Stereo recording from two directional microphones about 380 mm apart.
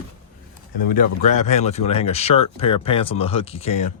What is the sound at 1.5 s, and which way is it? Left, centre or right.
Speech, centre.